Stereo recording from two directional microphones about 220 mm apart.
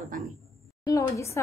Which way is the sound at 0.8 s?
15° left (ahead or behind).